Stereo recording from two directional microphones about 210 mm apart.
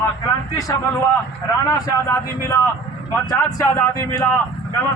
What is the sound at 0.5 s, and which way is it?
A man's voice, 15° left (ahead or behind).